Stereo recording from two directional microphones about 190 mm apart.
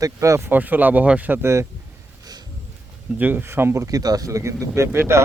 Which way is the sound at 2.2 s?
20° right (ahead or behind).